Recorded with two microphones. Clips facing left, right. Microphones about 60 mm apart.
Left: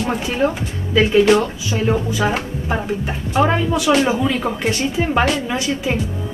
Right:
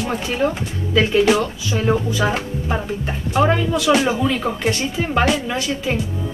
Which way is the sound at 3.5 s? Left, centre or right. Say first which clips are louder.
Even; left.